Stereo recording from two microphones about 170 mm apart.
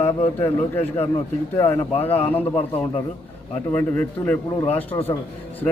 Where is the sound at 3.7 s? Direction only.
10° left (ahead or behind).